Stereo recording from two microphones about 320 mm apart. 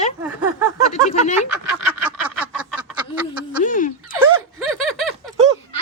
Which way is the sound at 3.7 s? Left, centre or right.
Left.